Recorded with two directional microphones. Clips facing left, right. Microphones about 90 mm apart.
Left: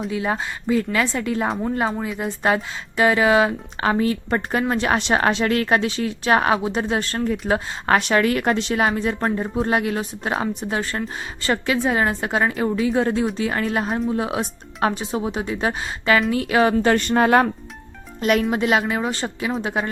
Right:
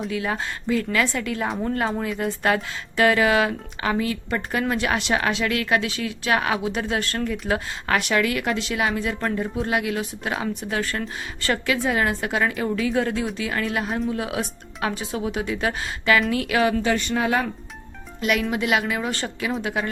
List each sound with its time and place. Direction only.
0.1 s speech: 25° left (ahead or behind)
2.0 s speech: 10° left (ahead or behind)
2.2 s a woman's voice: 25° left (ahead or behind)
16.8 s speech: 50° left (ahead or behind)
18.2 s a woman's voice: 40° left (ahead or behind)